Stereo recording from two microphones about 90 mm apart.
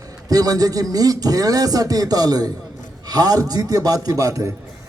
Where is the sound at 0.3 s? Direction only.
45° right (ahead or behind).